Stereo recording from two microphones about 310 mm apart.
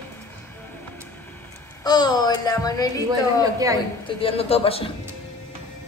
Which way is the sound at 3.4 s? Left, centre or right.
Centre.